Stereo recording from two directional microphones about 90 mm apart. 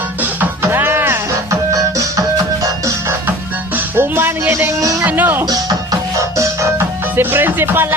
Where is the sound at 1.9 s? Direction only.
40° right (ahead or behind).